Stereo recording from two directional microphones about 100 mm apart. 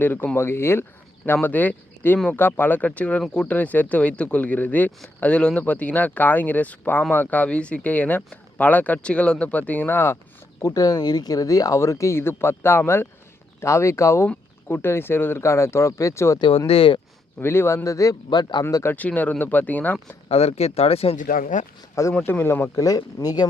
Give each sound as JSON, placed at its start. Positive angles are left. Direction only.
{"t": 0.0, "sound": "speech", "side_deg": 20}
{"t": 10.6, "sound": "speech", "side_deg": 35}
{"t": 16.6, "sound": "speech", "side_deg": 70}
{"t": 17.4, "sound": "speech", "side_deg": 25}
{"t": 18.3, "sound": "speech", "side_deg": 45}
{"t": 18.6, "sound": "speech", "side_deg": 25}
{"t": 18.9, "sound": "speech", "side_deg": 15}
{"t": 20.2, "sound": "speech", "side_deg": 85}
{"t": 22.0, "sound": "speech", "side_deg": 30}
{"t": 22.3, "sound": "speech", "side_deg": 20}
{"t": 22.7, "sound": "speech", "side_deg": 35}